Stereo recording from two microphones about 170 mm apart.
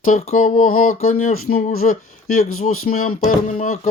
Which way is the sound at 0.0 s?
50° left (ahead or behind).